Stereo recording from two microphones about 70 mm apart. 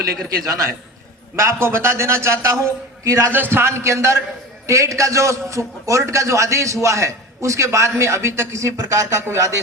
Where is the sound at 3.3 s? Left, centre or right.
Right.